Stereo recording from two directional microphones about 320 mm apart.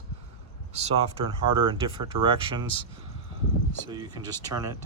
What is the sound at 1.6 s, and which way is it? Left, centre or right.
Speech, centre.